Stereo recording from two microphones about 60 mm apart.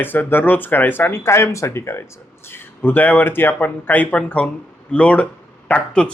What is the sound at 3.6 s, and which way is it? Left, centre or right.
Speech, left.